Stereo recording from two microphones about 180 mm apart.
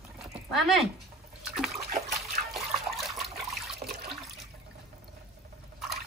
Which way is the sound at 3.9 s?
55° right (ahead or behind).